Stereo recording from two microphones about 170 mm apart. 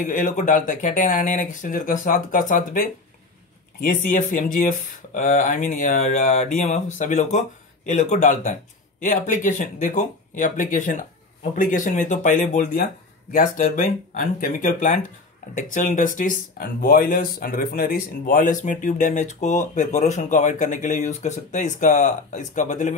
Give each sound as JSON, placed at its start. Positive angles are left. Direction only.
{"t": 0.0, "sound": "speech", "side_deg": 50}